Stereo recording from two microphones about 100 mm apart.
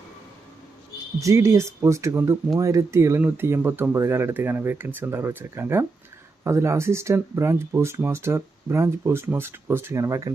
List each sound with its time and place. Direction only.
1.2 s speech: 30° right (ahead or behind)